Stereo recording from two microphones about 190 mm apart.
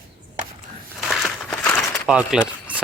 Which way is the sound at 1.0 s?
Centre (ahead or behind).